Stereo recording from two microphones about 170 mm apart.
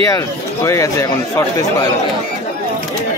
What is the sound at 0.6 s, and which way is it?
Speech, 15° left (ahead or behind).